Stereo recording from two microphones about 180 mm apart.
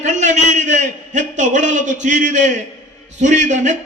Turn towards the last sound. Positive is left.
turn(degrees=-40)  # may be behind; listen again after turning